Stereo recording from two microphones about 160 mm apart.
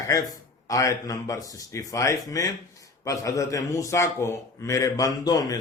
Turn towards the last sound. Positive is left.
turn(degrees=25)  # may be behind; listen again after turning